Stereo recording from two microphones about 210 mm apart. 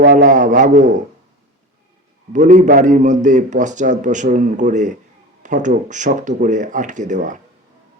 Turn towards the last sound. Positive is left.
turn(degrees=-35)  # may be behind; listen again after turning